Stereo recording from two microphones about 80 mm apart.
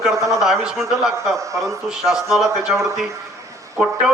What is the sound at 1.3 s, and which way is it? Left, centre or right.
Speech, right.